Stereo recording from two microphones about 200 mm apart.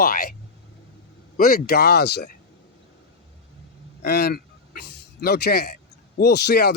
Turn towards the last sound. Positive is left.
turn(degrees=55)  # may be behind; listen again after turning